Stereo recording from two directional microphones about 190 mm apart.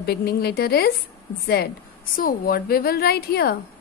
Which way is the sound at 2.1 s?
50° left (ahead or behind).